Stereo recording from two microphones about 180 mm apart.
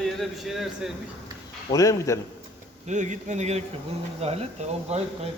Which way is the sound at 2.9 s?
40° right (ahead or behind).